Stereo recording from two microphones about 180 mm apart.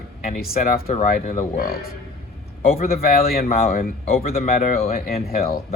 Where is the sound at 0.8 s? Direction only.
40° left (ahead or behind).